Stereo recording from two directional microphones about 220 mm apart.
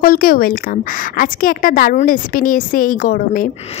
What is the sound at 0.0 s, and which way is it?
A woman's voice, 40° left (ahead or behind).